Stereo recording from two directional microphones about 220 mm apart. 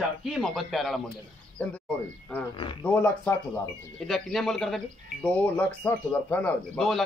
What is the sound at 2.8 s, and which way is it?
Speech, 10° left (ahead or behind).